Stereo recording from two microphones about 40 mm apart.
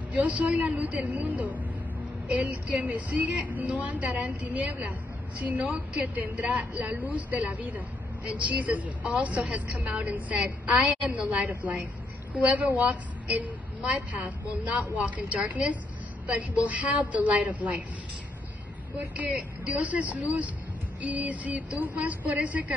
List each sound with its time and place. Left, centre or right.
0.1 s a woman's voice: right
18.9 s a woman's voice: right